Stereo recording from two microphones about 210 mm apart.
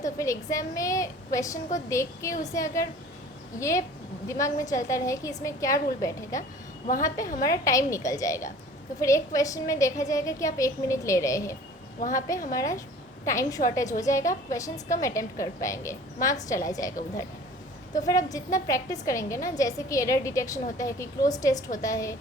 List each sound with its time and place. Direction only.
0.0 s a woman's voice: 15° left (ahead or behind)
7.4 s a woman's voice: 15° left (ahead or behind)
12.5 s a woman's voice: 15° left (ahead or behind)